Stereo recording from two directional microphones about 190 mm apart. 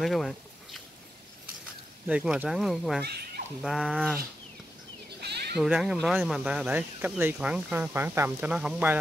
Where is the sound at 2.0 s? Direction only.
5° right (ahead or behind).